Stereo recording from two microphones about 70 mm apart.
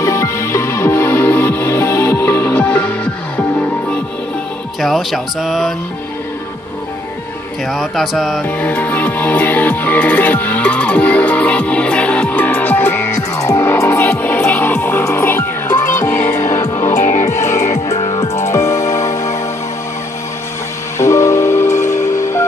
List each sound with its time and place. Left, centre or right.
0.0 s music: left
2.5 s music: centre
4.7 s speech: centre
7.7 s speech: centre
8.5 s music: left
13.4 s music: left
13.7 s music: left
21.0 s music: left